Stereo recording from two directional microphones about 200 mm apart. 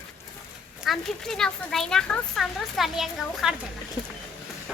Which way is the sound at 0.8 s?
Centre (ahead or behind).